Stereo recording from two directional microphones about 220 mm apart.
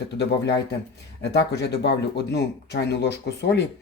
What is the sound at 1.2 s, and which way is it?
Speech, 50° left (ahead or behind).